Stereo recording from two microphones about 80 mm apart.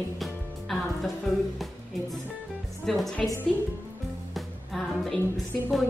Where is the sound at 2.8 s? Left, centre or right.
Centre.